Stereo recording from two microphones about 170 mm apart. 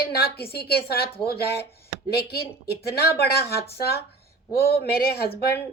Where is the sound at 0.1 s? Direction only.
70° left (ahead or behind).